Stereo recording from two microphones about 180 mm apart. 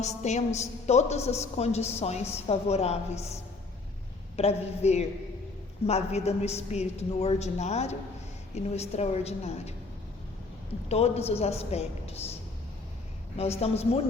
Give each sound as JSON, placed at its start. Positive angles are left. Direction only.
{"t": 0.0, "sound": "a woman's voice", "side_deg": 40}
{"t": 4.4, "sound": "a woman's voice", "side_deg": 35}
{"t": 10.8, "sound": "a woman's voice", "side_deg": 35}
{"t": 13.3, "sound": "a woman's voice", "side_deg": 35}